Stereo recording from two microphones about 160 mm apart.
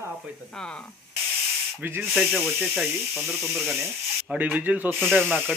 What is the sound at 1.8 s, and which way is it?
Speech, 15° right (ahead or behind).